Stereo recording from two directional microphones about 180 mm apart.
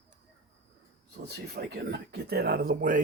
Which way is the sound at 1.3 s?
65° right (ahead or behind).